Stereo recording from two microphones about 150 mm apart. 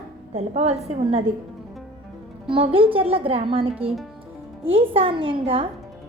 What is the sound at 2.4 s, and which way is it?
Speech, 40° right (ahead or behind).